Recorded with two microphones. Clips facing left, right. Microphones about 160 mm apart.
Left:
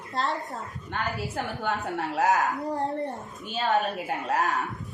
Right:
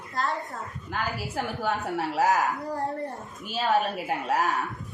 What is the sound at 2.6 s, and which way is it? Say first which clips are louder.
Speech: left 2 dB; 20° left (ahead or behind).